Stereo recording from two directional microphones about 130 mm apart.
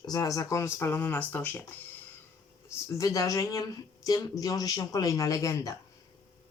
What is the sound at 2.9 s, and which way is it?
Speech, 25° left (ahead or behind).